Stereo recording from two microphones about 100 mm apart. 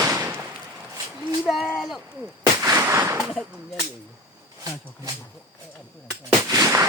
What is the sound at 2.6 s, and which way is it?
Gunshot, 30° right (ahead or behind).